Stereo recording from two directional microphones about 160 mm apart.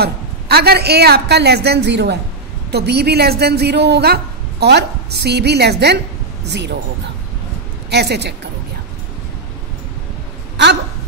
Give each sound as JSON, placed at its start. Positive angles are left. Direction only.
{"t": 0.0, "sound": "a woman's voice", "side_deg": -80}
{"t": 7.9, "sound": "a woman's voice", "side_deg": -90}